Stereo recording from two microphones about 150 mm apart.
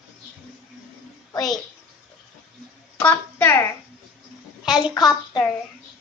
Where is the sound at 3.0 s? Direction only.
15° left (ahead or behind).